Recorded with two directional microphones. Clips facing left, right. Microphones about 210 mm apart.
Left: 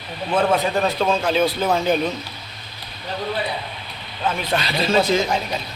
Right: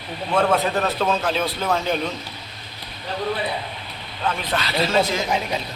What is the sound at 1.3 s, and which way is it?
Speech, centre (ahead or behind).